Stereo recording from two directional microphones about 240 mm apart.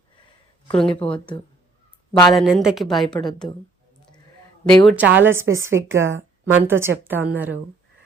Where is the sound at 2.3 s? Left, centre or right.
Centre.